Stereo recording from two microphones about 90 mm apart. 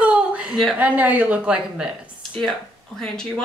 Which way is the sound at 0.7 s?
15° right (ahead or behind).